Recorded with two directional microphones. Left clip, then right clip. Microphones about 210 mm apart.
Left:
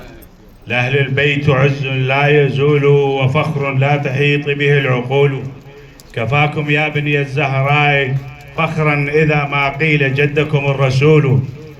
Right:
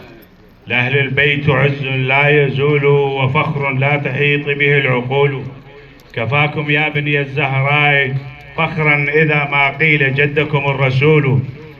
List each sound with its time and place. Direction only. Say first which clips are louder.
0.7 s a man's voice: right 1 dB; 70° left (ahead or behind)